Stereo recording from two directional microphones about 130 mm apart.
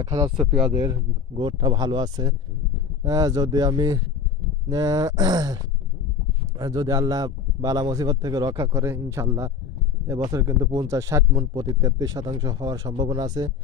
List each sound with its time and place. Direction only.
0.0 s a man's voice: 25° right (ahead or behind)
1.3 s a man's voice: 40° right (ahead or behind)
6.6 s a man's voice: 30° right (ahead or behind)